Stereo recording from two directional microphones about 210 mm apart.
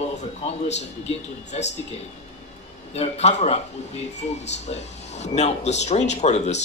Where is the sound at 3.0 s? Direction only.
30° left (ahead or behind).